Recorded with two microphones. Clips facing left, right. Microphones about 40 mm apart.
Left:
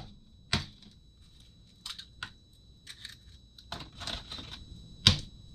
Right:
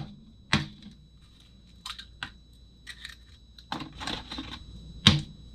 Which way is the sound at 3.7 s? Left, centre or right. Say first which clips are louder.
Right 6 dB; right.